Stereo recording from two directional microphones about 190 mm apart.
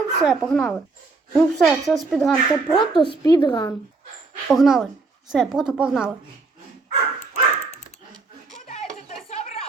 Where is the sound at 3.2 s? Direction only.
20° left (ahead or behind).